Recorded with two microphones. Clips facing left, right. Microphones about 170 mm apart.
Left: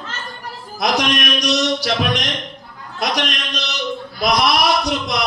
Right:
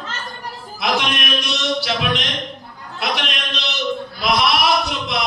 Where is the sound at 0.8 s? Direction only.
40° left (ahead or behind).